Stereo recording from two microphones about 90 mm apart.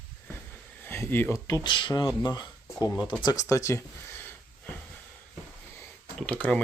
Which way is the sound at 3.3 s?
35° left (ahead or behind).